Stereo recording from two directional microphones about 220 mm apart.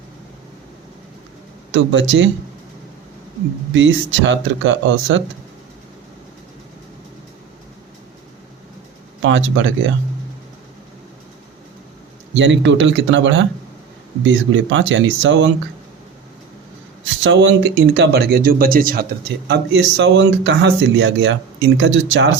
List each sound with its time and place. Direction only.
1.7 s speech: 60° right (ahead or behind)
3.8 s speech: 55° right (ahead or behind)
9.2 s speech: 60° right (ahead or behind)
12.4 s speech: 55° right (ahead or behind)
17.2 s speech: 55° right (ahead or behind)